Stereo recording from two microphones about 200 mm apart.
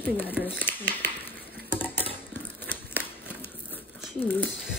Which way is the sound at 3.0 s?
45° left (ahead or behind).